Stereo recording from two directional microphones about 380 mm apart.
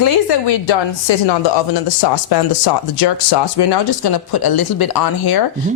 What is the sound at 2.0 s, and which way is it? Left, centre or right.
Speech, left.